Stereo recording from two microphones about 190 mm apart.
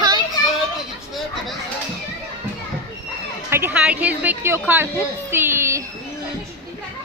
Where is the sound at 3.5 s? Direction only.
10° right (ahead or behind).